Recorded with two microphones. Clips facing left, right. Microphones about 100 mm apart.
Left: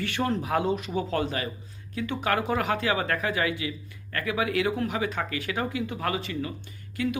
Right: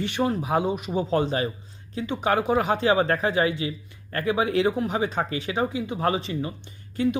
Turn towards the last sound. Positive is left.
turn(degrees=-25)  # may be behind; listen again after turning